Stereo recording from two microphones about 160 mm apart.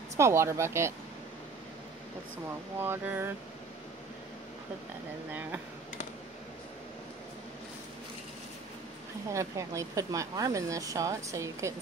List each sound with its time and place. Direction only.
0.2 s speech: 15° right (ahead or behind)
2.8 s speech: 15° right (ahead or behind)
9.3 s a woman's voice: 20° right (ahead or behind)